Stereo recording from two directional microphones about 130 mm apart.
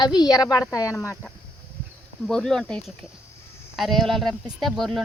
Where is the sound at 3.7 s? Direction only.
Centre (ahead or behind).